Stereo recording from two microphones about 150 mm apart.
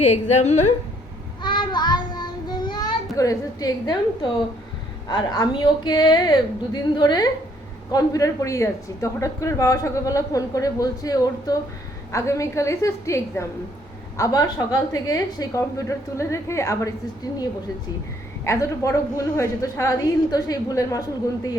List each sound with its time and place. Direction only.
0.0 s a woman's voice: 50° left (ahead or behind)
1.4 s child singing: 30° left (ahead or behind)
5.0 s a woman's voice: 25° left (ahead or behind)
18.4 s a woman's voice: 20° left (ahead or behind)